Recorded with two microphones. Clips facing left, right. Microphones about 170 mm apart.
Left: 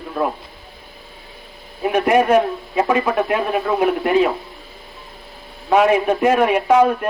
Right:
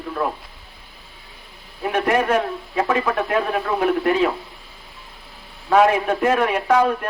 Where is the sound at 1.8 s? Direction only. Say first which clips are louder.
Left 4 dB; 15° left (ahead or behind).